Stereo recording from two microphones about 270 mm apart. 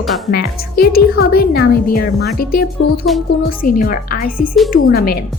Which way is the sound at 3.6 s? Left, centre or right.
Left.